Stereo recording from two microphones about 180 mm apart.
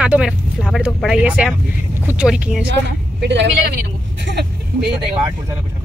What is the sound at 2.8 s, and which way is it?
Speech, 75° right (ahead or behind).